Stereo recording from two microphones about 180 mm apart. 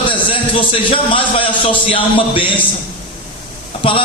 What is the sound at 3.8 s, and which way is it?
Speech, 30° left (ahead or behind).